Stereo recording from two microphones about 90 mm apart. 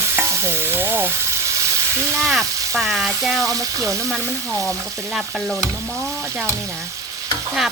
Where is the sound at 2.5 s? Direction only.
40° right (ahead or behind).